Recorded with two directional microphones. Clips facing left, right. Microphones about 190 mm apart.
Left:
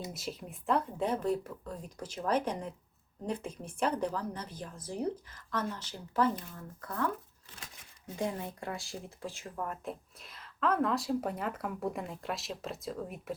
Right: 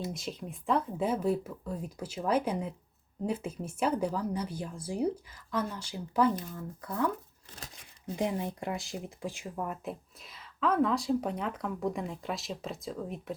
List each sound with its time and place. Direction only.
0.1 s speech: 5° left (ahead or behind); by 7.1 s 15° right (ahead or behind)
7.5 s crumpling: 40° right (ahead or behind)
8.1 s speech: 20° right (ahead or behind); by 13.3 s 5° left (ahead or behind)